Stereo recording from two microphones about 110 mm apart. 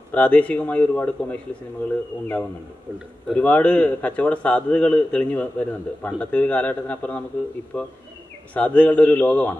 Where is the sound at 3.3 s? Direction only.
10° left (ahead or behind).